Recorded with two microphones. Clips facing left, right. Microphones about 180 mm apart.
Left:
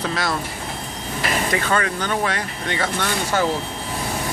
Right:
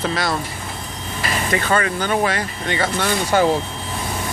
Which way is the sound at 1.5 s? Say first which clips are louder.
Right 5 dB; centre (ahead or behind).